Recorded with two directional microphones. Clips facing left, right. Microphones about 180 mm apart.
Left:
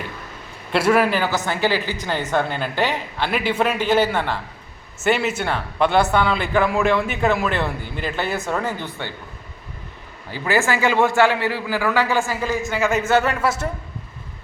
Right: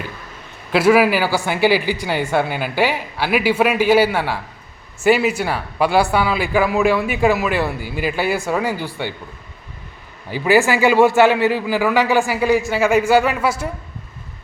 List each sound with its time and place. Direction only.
0.7 s a man's voice: 5° right (ahead or behind)
10.3 s speech: 15° right (ahead or behind)